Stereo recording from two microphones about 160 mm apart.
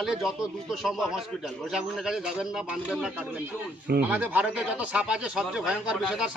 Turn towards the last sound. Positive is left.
turn(degrees=-5)  # may be behind; listen again after turning